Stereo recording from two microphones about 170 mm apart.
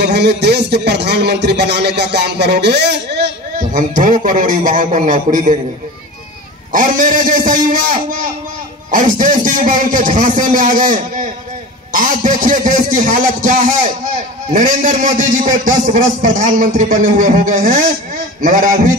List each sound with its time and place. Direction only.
0.0 s a man's voice: 75° right (ahead or behind)
3.5 s a man's voice: 50° right (ahead or behind)
6.7 s a man's voice: 50° right (ahead or behind)